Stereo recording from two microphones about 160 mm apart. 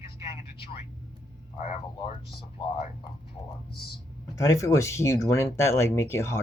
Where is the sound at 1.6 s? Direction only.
40° left (ahead or behind).